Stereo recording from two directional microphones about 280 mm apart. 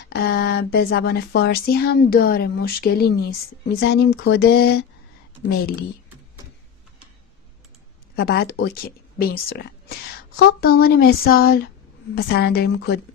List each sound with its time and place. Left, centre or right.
0.1 s speech: left
8.2 s speech: left